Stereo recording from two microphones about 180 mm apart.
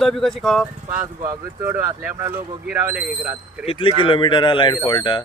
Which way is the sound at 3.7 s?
30° left (ahead or behind).